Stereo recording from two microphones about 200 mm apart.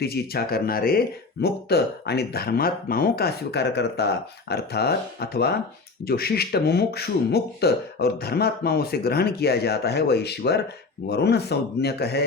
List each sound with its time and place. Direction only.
0.0 s speech: 50° left (ahead or behind)